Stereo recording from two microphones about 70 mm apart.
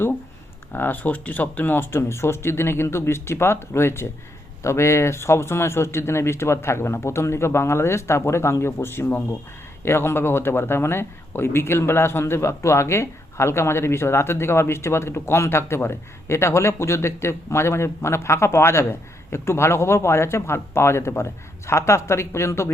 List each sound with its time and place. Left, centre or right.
0.7 s speech: left